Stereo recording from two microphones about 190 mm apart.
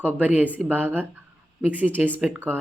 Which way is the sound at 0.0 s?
10° right (ahead or behind).